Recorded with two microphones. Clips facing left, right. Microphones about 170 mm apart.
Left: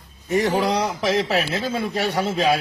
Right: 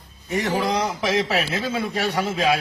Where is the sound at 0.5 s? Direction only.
Centre (ahead or behind).